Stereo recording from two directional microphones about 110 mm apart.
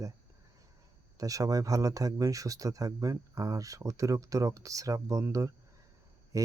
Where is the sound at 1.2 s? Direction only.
30° right (ahead or behind).